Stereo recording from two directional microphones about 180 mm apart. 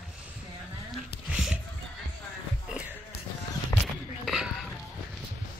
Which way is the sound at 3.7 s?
20° left (ahead or behind).